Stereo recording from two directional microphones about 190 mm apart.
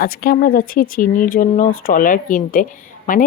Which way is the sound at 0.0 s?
50° left (ahead or behind).